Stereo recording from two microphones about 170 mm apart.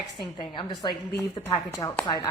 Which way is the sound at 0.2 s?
25° left (ahead or behind).